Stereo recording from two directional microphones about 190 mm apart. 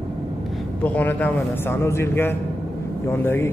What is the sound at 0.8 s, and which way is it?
A man's voice, 10° left (ahead or behind).